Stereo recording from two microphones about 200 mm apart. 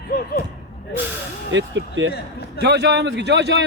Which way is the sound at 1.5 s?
65° right (ahead or behind).